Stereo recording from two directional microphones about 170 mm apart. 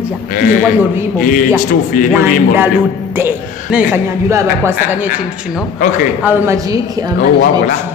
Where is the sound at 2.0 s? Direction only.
50° left (ahead or behind).